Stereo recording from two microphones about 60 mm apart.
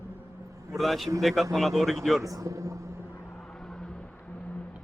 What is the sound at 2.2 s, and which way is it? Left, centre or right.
Speech, right.